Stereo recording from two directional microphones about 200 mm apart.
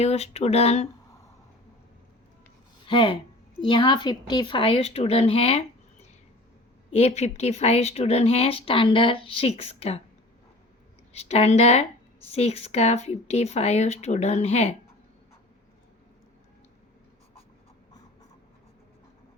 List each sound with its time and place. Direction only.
0.0 s speech: 30° left (ahead or behind)
2.8 s speech: 25° left (ahead or behind)
6.9 s speech: 35° left (ahead or behind)
11.1 s speech: 30° left (ahead or behind)